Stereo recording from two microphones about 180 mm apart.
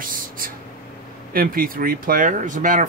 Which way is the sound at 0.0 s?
50° right (ahead or behind).